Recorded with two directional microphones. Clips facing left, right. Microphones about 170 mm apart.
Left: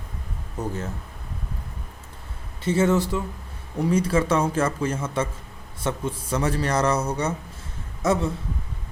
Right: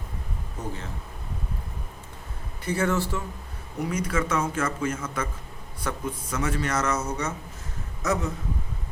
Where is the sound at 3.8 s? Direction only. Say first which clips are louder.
Left 6 dB; 30° left (ahead or behind).